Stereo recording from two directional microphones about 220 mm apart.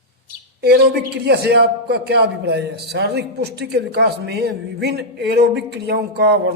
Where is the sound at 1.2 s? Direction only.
50° right (ahead or behind).